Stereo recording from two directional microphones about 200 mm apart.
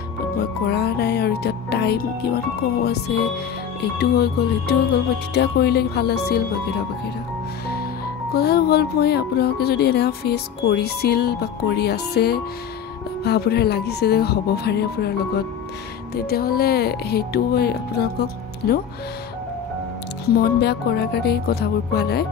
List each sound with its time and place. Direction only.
0.4 s music: 55° left (ahead or behind)
4.0 s speech: 55° left (ahead or behind)
8.4 s speech: 55° left (ahead or behind)
20.2 s speech: 50° left (ahead or behind)